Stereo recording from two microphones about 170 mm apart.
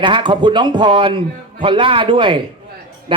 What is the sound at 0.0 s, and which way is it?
A man's voice, 30° right (ahead or behind).